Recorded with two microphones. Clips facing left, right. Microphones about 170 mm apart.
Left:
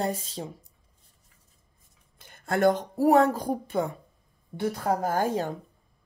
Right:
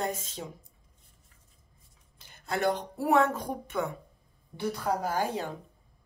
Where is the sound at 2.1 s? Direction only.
50° left (ahead or behind); by 3.9 s 30° left (ahead or behind).